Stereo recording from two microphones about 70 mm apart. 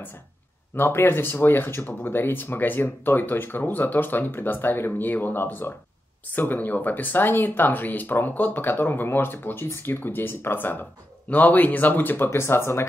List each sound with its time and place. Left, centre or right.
0.7 s speech: left